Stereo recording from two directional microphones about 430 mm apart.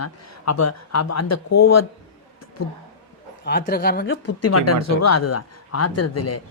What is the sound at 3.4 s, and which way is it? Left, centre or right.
Speech, left.